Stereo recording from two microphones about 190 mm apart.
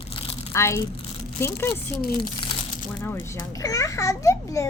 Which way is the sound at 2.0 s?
50° left (ahead or behind).